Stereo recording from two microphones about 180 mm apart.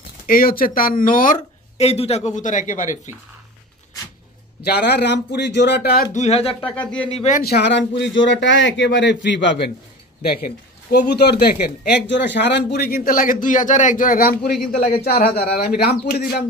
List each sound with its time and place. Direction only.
0.3 s speech: 55° left (ahead or behind)
4.6 s speech: 65° left (ahead or behind)
6.1 s speech: 35° left (ahead or behind)
6.7 s speech: 5° left (ahead or behind)
7.1 s speech: 40° left (ahead or behind)
7.4 s speech: 70° left (ahead or behind)
10.4 s speech: 65° left (ahead or behind)